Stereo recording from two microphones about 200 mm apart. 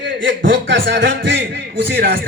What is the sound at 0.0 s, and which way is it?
Speech, 65° right (ahead or behind).